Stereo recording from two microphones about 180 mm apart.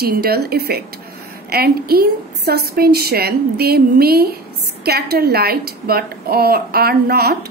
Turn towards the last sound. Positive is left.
turn(degrees=-60)  # may be behind; listen again after turning